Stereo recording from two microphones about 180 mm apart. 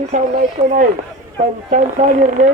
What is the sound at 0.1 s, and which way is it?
Speech, 40° right (ahead or behind).